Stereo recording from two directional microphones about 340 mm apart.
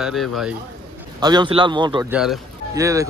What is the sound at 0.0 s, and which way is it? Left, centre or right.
Speech, centre.